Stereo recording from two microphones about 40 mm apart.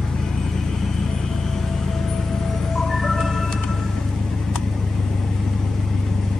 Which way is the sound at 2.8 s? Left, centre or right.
Centre.